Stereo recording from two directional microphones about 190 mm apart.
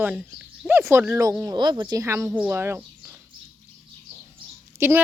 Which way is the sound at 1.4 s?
25° right (ahead or behind).